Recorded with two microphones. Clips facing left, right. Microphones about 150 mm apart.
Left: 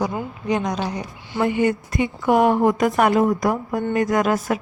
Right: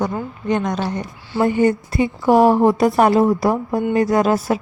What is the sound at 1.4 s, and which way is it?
A woman's voice, 40° right (ahead or behind).